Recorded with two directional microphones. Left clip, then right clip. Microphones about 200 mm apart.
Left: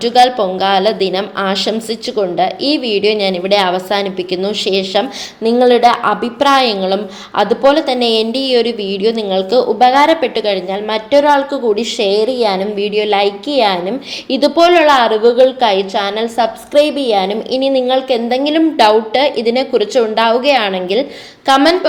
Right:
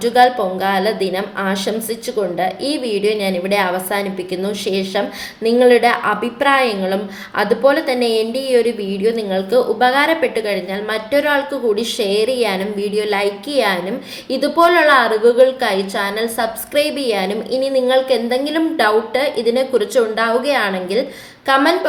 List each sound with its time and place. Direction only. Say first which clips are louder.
0.1 s a woman's voice: left 3 dB; 25° left (ahead or behind)